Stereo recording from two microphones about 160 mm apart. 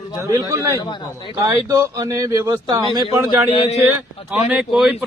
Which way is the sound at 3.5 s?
45° left (ahead or behind).